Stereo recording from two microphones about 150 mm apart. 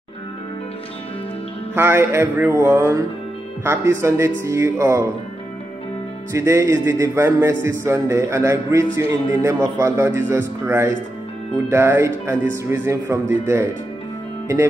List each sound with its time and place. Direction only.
1.8 s a man's voice: 15° right (ahead or behind)
6.3 s a man's voice: 20° right (ahead or behind)